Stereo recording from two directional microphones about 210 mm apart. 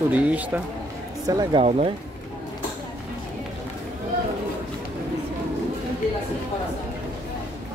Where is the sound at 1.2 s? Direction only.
20° right (ahead or behind).